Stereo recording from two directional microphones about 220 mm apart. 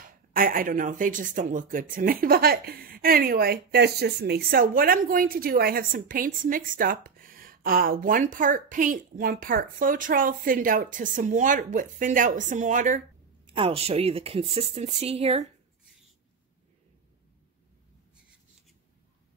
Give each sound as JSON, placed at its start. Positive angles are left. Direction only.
{"t": 0.3, "sound": "speech", "side_deg": -40}